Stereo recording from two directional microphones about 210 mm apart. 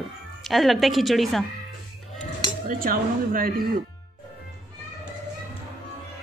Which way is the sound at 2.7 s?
40° right (ahead or behind).